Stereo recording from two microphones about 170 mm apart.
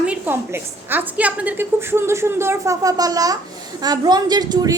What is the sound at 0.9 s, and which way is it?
A woman's voice, 10° right (ahead or behind).